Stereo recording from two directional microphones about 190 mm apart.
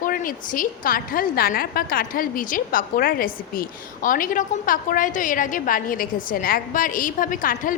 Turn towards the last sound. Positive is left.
turn(degrees=45)  # may be behind; listen again after turning